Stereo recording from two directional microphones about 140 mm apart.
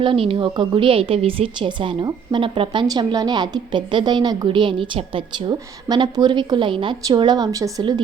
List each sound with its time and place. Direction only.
0.0 s a woman's voice: 40° right (ahead or behind)